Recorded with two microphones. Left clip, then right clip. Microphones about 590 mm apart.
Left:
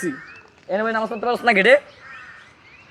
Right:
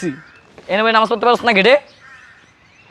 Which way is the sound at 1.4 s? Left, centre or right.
Right.